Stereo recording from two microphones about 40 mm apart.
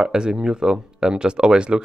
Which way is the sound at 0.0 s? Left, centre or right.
Centre.